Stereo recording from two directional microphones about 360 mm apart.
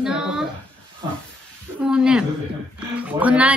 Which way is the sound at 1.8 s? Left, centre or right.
Centre.